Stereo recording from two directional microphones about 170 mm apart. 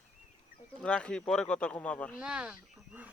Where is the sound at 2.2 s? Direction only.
5° right (ahead or behind).